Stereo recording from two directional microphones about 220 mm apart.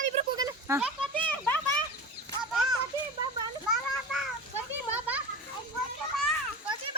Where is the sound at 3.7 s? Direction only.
Centre (ahead or behind).